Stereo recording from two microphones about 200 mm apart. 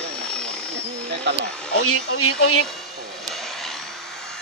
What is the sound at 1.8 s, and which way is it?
Speech, 90° left.